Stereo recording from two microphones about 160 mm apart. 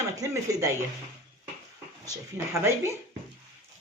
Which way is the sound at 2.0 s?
15° right (ahead or behind).